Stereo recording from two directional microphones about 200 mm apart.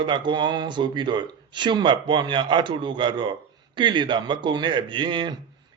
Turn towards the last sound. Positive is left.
turn(degrees=-20)  # may be behind; listen again after turning